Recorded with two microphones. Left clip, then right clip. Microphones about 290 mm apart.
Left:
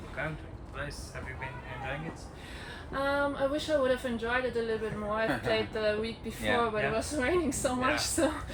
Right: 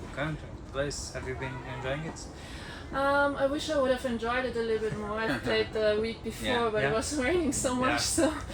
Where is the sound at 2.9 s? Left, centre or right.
Centre.